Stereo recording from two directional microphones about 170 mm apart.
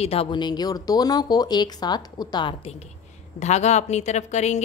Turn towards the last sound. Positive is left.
turn(degrees=40)  # may be behind; listen again after turning